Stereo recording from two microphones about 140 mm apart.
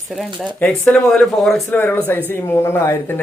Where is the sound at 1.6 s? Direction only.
15° left (ahead or behind).